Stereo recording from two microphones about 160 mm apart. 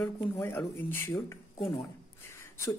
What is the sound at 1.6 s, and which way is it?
Speech, 30° left (ahead or behind).